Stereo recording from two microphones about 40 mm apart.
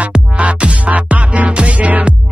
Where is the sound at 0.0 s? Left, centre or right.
Right.